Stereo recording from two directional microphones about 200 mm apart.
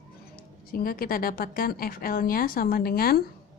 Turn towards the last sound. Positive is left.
turn(degrees=50)  # may be behind; listen again after turning